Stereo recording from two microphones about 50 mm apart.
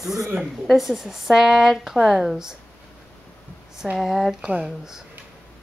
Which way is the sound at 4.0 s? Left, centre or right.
Centre.